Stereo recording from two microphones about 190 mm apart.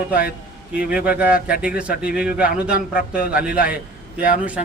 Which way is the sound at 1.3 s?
50° left (ahead or behind).